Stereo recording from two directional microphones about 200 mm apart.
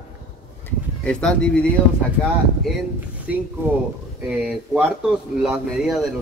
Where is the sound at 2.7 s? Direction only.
5° right (ahead or behind).